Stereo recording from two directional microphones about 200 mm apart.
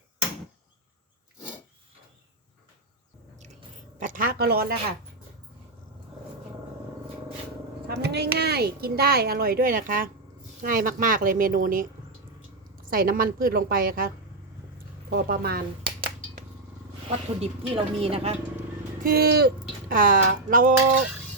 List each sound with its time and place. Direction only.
4.0 s speech: 45° right (ahead or behind)
7.9 s speech: 55° right (ahead or behind)
12.9 s speech: 45° right (ahead or behind)
15.1 s speech: 50° right (ahead or behind)
17.1 s speech: 30° right (ahead or behind)
19.0 s speech: 50° right (ahead or behind)